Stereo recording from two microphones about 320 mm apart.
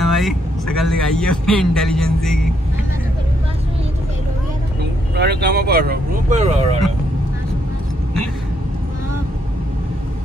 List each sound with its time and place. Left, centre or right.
0.0 s speech: centre
5.1 s speech: right